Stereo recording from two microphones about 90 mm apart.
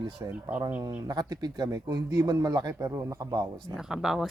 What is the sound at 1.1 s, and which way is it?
Speech, 45° right (ahead or behind).